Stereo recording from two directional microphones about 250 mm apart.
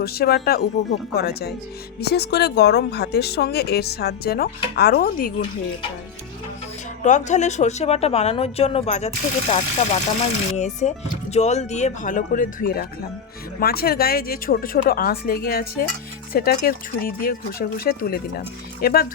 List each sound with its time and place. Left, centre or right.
0.0 s speech: left
7.0 s a woman's voice: left